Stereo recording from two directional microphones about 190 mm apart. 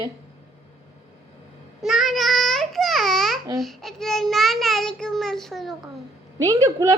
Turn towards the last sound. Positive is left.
turn(degrees=-15)  # may be behind; listen again after turning